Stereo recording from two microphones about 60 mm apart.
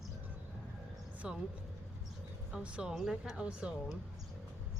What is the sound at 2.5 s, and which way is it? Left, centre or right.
Speech, centre.